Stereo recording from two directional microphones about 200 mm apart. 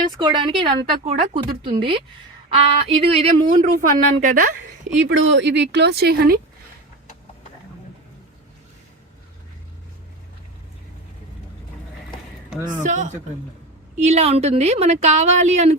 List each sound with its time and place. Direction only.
0.2 s a woman's voice: 20° right (ahead or behind); by 4.5 s 40° right (ahead or behind)
5.0 s speech: 65° right (ahead or behind); by 6.4 s 50° right (ahead or behind)
12.5 s speech: 10° right (ahead or behind)
12.8 s a woman's voice: 35° right (ahead or behind)